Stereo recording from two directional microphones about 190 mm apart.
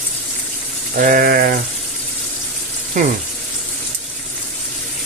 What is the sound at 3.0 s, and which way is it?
Frying, 40° right (ahead or behind).